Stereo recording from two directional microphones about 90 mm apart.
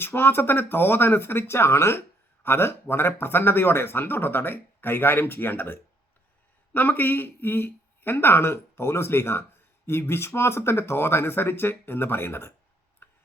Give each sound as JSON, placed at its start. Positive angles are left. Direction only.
{"t": 0.0, "sound": "speech", "side_deg": 25}
{"t": 13.0, "sound": "tick-tock", "side_deg": 25}